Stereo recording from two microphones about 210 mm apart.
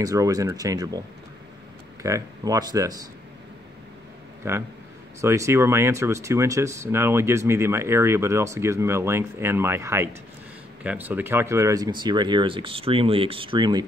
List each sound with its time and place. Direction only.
0.0 s speech: 15° right (ahead or behind)
2.0 s speech: 15° right (ahead or behind)
4.4 s speech: 10° right (ahead or behind)